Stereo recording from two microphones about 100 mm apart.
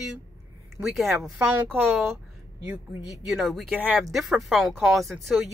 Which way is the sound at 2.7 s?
5° right (ahead or behind).